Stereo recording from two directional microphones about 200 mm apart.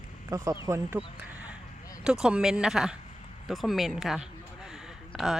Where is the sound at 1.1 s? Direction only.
5° right (ahead or behind).